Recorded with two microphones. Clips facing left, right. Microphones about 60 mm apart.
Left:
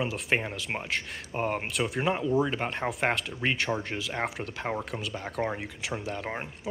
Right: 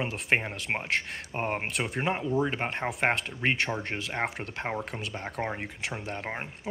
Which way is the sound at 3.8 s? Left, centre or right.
Right.